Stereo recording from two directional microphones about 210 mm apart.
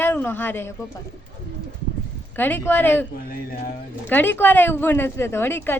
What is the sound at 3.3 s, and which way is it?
Speech, 40° left (ahead or behind).